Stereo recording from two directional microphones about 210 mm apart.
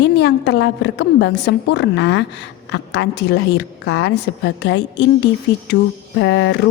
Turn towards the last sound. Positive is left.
turn(degrees=55)  # may be behind; listen again after turning